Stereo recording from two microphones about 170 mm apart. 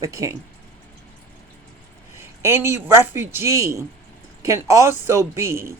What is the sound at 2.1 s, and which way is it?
Speech, 15° right (ahead or behind).